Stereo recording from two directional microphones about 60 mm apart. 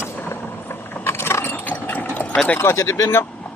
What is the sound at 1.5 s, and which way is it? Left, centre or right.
Engine, left.